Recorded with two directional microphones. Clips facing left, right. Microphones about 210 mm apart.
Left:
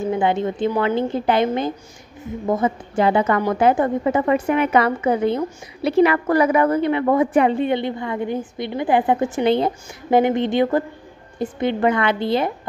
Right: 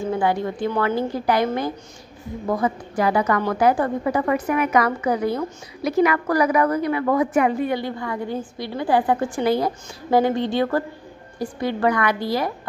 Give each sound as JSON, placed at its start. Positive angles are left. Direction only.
{"t": 0.0, "sound": "a woman's voice", "side_deg": 20}